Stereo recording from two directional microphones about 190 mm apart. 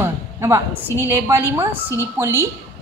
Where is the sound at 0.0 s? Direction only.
15° right (ahead or behind).